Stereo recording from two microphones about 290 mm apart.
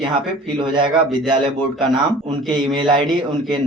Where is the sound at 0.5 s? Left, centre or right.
Centre.